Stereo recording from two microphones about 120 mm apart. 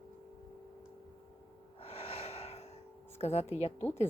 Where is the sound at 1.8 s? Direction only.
55° left (ahead or behind).